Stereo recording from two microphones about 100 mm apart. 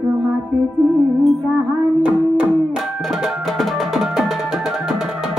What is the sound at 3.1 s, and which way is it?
Music, centre (ahead or behind).